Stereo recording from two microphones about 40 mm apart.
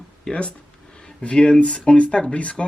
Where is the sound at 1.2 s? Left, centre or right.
Left.